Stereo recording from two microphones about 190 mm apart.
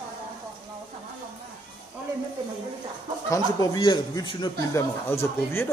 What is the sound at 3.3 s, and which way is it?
Speech, 20° left (ahead or behind).